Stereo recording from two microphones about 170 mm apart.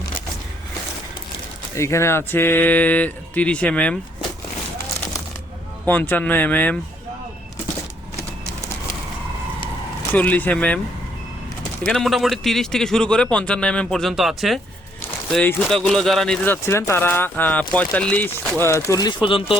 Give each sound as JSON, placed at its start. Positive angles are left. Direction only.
{"t": 1.7, "sound": "speech", "side_deg": 15}
{"t": 5.8, "sound": "speech", "side_deg": 10}
{"t": 10.2, "sound": "speech", "side_deg": 10}
{"t": 11.9, "sound": "a man's voice", "side_deg": 0}
{"t": 18.9, "sound": "speech", "side_deg": 25}